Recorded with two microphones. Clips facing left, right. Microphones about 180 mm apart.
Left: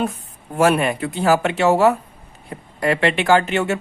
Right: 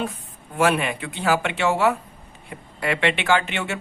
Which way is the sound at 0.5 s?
40° left (ahead or behind).